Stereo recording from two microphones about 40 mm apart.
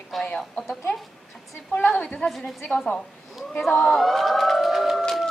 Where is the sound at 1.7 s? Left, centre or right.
Left.